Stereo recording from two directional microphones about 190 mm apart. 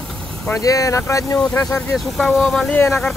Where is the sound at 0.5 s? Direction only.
20° left (ahead or behind).